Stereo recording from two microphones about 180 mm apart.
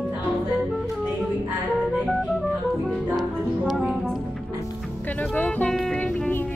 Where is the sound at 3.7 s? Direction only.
Centre (ahead or behind).